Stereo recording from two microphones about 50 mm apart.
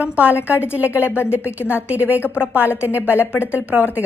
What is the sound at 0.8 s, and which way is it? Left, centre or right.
A woman's voice, left.